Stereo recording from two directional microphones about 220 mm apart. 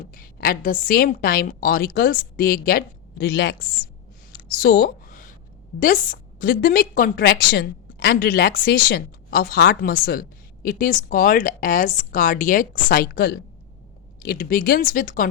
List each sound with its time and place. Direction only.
0.0 s a woman's voice: 40° left (ahead or behind)
4.4 s a sound: 40° left (ahead or behind)
5.8 s a woman's voice: 40° left (ahead or behind)